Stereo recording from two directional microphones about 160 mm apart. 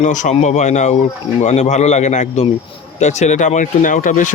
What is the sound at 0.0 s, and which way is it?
Speech, 50° left (ahead or behind).